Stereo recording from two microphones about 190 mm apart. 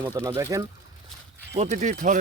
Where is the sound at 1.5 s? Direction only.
40° right (ahead or behind).